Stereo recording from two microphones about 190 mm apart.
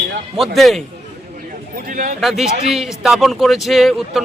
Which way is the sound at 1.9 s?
45° right (ahead or behind).